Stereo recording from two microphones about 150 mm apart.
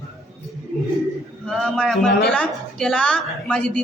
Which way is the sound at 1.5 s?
5° left (ahead or behind).